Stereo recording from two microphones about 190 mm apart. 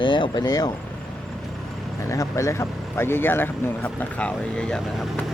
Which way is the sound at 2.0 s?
15° left (ahead or behind).